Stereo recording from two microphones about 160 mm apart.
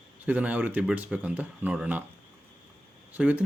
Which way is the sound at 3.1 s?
10° right (ahead or behind).